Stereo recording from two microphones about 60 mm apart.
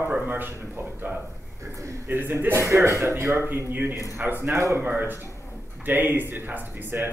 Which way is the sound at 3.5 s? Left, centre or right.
Right.